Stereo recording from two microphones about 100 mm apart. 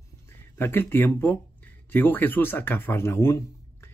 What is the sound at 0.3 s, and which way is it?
Speech, 20° left (ahead or behind).